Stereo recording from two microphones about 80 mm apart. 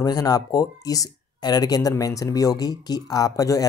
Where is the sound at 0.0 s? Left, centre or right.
Left.